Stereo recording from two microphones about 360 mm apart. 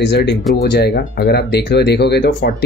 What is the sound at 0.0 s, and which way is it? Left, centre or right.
Speech, left.